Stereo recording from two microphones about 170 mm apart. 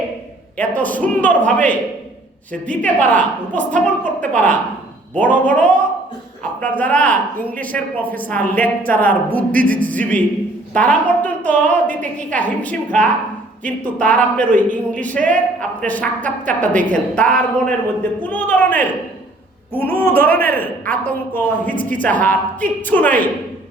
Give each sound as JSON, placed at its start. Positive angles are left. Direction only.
{"t": 0.5, "sound": "a woman's voice", "side_deg": 10}
{"t": 9.5, "sound": "a capella", "side_deg": -55}
{"t": 9.8, "sound": "a woman's voice", "side_deg": 10}